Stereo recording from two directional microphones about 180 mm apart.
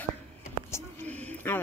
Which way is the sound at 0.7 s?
10° left (ahead or behind).